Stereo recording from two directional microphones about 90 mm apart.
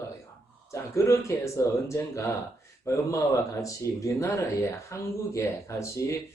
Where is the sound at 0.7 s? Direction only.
35° left (ahead or behind).